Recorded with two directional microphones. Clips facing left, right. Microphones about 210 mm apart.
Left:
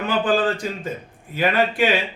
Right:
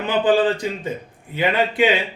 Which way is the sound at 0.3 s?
20° right (ahead or behind).